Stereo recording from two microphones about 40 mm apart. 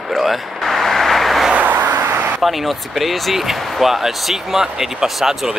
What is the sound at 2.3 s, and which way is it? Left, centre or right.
Speech, centre.